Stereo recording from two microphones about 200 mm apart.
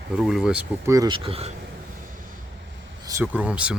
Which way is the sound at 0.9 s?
20° right (ahead or behind).